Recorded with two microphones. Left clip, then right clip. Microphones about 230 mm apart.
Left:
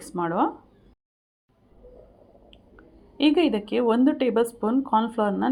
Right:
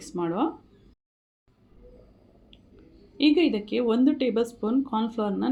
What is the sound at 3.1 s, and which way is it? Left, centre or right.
Speech, centre.